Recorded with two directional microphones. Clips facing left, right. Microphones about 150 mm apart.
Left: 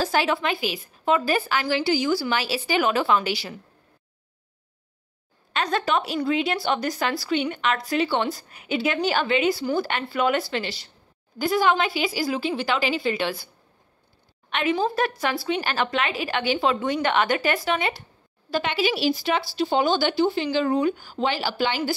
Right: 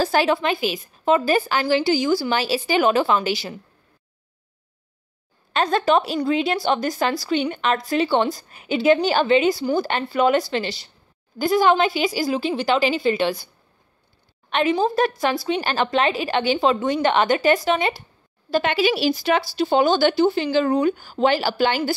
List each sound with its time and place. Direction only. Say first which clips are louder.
0.0 s speech: right 4 dB; 35° right (ahead or behind)
5.5 s speech: right 5 dB; 30° right (ahead or behind)
14.5 s speech: right 4 dB; 30° right (ahead or behind)
18.5 s speech: right 4 dB; 45° right (ahead or behind); by 20.9 s 65° right (ahead or behind)
21.0 s speech: right 6 dB; 45° right (ahead or behind)